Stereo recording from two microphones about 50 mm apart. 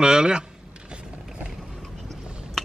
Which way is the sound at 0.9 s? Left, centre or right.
Centre.